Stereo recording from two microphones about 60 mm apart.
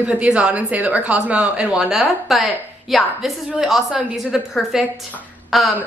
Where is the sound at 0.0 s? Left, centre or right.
Centre.